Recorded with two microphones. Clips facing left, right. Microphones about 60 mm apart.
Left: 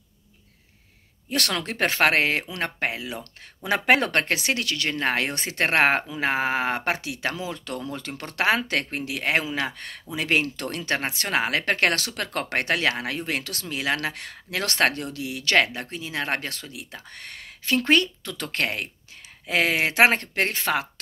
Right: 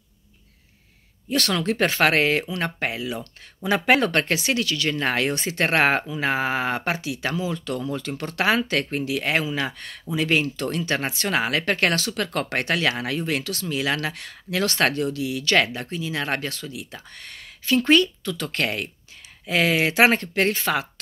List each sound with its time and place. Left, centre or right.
1.3 s speech: left
4.9 s speech: left
7.9 s speech: left
11.0 s speech: left
13.3 s speech: left
18.5 s speech: left